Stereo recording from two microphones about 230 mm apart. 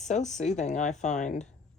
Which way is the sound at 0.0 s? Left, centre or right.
Left.